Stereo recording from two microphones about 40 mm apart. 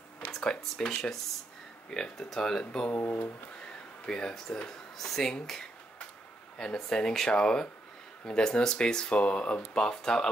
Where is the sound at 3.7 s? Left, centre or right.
Left.